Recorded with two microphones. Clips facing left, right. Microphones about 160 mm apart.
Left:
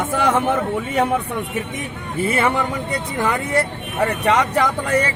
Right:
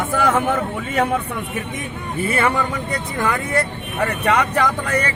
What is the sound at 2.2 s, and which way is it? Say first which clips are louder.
Speech: left 1 dB; 20° left (ahead or behind).